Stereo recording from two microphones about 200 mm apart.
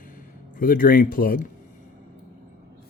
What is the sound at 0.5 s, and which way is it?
Speech, 45° left (ahead or behind).